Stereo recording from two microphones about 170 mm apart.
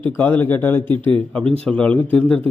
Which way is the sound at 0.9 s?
30° right (ahead or behind).